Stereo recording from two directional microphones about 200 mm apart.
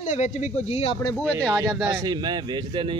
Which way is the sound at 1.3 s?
15° right (ahead or behind).